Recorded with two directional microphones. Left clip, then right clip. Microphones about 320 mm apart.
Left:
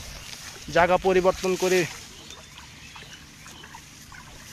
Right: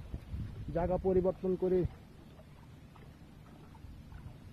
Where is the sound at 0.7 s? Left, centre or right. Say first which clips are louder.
Left 12 dB; centre.